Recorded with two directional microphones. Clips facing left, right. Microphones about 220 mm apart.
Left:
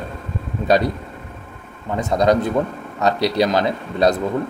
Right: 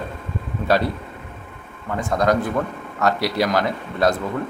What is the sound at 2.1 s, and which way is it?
A man's voice, 20° left (ahead or behind).